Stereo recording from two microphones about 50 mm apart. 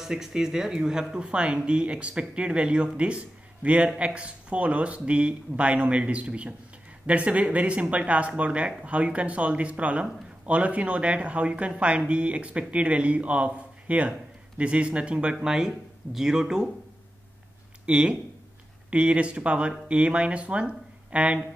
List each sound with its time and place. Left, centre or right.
0.0 s speech: centre
15.4 s speech: centre
17.8 s speech: centre